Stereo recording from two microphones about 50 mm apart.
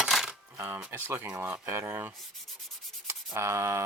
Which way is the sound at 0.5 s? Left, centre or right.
Right.